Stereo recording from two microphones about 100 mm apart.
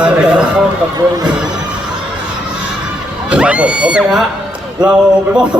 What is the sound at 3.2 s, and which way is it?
A man's voice, 10° right (ahead or behind).